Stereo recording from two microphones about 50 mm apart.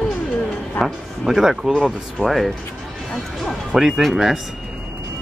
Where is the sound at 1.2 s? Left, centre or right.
Centre.